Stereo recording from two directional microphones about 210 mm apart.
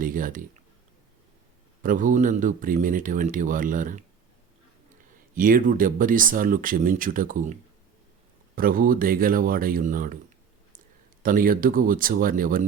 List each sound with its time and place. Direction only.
0.0 s speech: 40° right (ahead or behind)
1.8 s speech: 40° right (ahead or behind)
5.3 s speech: 40° right (ahead or behind)
11.2 s speech: 40° right (ahead or behind)